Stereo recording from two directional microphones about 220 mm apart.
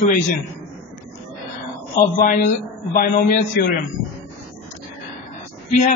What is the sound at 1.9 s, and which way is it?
A man's voice, 40° left (ahead or behind).